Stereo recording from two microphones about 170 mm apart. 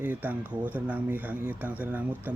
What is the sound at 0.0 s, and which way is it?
Speech, 10° right (ahead or behind).